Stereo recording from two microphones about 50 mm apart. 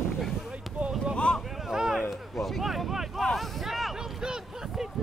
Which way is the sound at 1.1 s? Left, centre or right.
Left.